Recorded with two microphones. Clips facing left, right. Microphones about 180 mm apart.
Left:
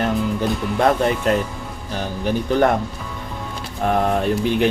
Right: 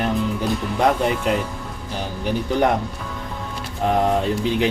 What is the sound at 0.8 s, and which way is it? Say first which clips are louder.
Speech: left 2 dB; 10° right (ahead or behind).